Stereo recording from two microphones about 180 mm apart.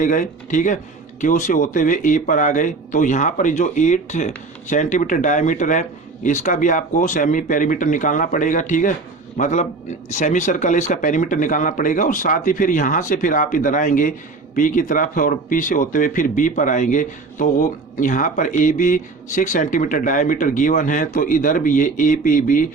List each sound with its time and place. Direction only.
0.0 s a man's voice: 45° left (ahead or behind)